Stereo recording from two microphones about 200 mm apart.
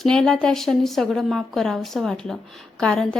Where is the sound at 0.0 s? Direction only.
5° left (ahead or behind).